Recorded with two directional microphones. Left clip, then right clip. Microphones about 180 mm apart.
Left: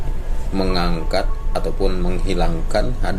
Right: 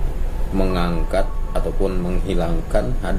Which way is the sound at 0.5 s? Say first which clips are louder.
Left 1 dB; 15° left (ahead or behind).